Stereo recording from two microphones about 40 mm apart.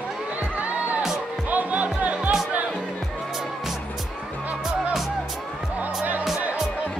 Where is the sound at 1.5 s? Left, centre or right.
Right.